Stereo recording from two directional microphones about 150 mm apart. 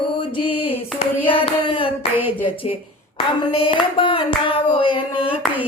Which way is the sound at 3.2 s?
35° left (ahead or behind).